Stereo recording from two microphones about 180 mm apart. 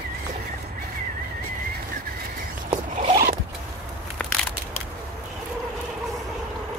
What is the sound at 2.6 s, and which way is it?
Zipper, 30° right (ahead or behind).